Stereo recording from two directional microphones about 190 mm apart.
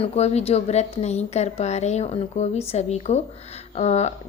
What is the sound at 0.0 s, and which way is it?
A woman's voice, 35° left (ahead or behind).